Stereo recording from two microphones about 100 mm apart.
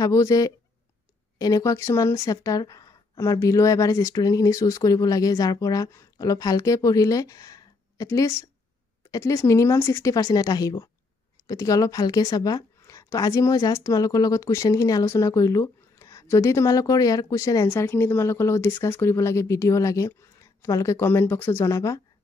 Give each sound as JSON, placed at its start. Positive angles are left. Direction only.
{"t": 0.0, "sound": "a woman's voice", "side_deg": 35}